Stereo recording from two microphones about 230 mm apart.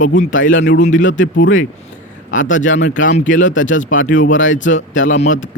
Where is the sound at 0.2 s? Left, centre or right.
Left.